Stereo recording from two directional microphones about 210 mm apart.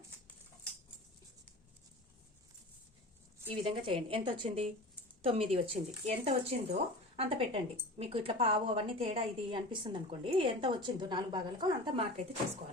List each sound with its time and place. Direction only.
3.4 s a woman's voice: 25° right (ahead or behind)